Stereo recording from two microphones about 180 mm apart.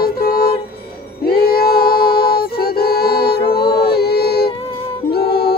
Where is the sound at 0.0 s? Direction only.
60° left (ahead or behind).